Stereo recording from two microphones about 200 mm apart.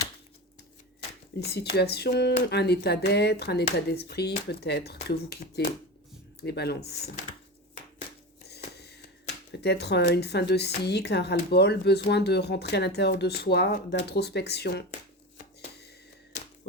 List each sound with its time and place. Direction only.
1.7 s a woman's voice: 55° left (ahead or behind)
9.6 s a woman's voice: 55° left (ahead or behind)